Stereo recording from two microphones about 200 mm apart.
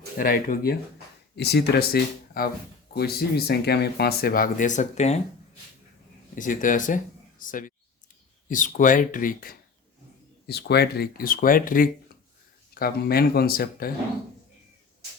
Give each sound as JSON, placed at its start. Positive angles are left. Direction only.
{"t": 0.2, "sound": "speech", "side_deg": 45}
{"t": 6.3, "sound": "speech", "side_deg": 40}
{"t": 10.4, "sound": "speech", "side_deg": 55}